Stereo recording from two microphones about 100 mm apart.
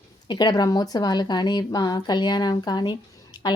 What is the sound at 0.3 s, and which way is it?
Speech, 45° left (ahead or behind).